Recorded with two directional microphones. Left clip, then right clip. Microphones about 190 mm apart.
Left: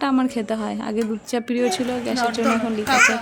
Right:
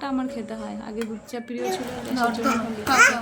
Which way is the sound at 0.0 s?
45° left (ahead or behind).